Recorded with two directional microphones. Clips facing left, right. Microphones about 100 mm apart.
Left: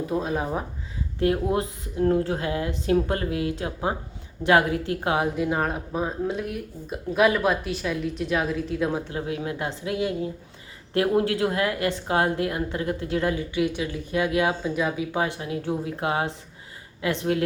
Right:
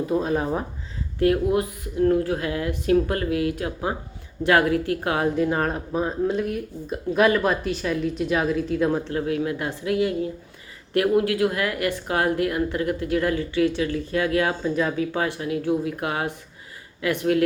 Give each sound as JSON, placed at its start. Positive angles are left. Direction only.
{"t": 0.1, "sound": "speech", "side_deg": 0}
{"t": 1.2, "sound": "a woman's voice", "side_deg": 25}
{"t": 5.4, "sound": "speech", "side_deg": 5}
{"t": 9.1, "sound": "a woman's voice", "side_deg": 20}